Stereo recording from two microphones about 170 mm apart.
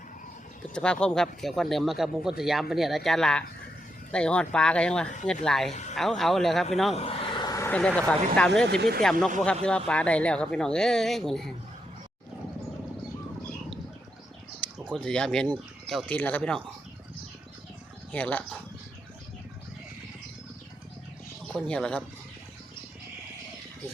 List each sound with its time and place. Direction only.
0.7 s speech: 5° left (ahead or behind)
6.9 s a sound: 35° left (ahead or behind)
7.7 s speech: 5° left (ahead or behind)
8.6 s speech: 75° right (ahead or behind)
9.4 s speech: 5° left (ahead or behind)
14.6 s a sound: 5° left (ahead or behind)
14.9 s speech: 5° left (ahead or behind)
18.1 s speech: 10° left (ahead or behind)
21.5 s speech: 5° left (ahead or behind)